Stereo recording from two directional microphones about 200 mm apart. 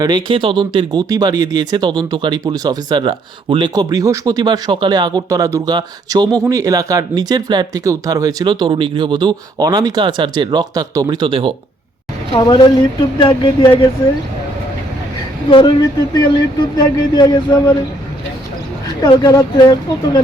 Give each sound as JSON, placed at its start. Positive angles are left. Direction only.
{"t": 0.0, "sound": "speech", "side_deg": -20}
{"t": 12.3, "sound": "speech", "side_deg": 20}
{"t": 15.4, "sound": "speech", "side_deg": 25}
{"t": 19.0, "sound": "speech", "side_deg": 20}